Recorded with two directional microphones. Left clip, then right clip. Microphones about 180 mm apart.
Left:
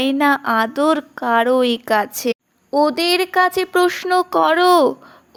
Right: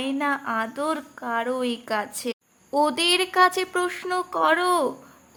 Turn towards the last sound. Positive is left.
turn(degrees=35)  # may be behind; listen again after turning